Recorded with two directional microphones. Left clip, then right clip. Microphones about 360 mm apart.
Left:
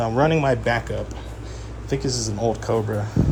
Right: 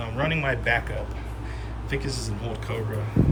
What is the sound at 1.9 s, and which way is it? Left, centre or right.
Speech, centre.